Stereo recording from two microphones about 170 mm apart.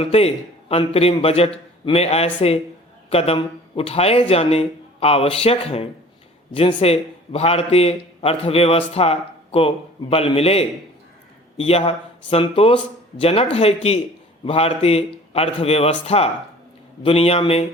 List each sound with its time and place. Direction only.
0.0 s a man's voice: 35° left (ahead or behind)